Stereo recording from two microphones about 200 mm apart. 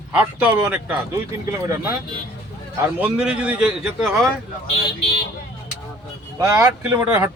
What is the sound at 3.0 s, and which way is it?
Speech, 5° right (ahead or behind).